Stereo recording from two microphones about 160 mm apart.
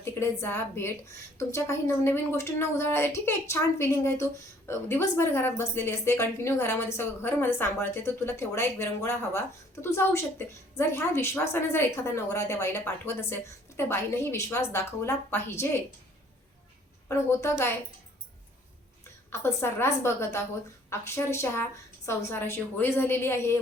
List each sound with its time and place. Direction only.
0.0 s a woman's voice: 15° left (ahead or behind)
17.1 s a woman's voice: 20° left (ahead or behind)
19.3 s a woman's voice: 15° left (ahead or behind)